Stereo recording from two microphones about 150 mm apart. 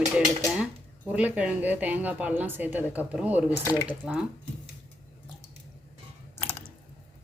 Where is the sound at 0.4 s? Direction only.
5° right (ahead or behind).